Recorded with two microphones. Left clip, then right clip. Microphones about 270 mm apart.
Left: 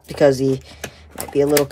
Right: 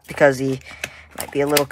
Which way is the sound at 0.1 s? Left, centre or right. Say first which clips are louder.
Left 1 dB; centre.